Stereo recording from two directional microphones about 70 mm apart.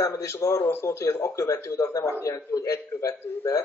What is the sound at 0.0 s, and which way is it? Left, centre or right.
Speech, left.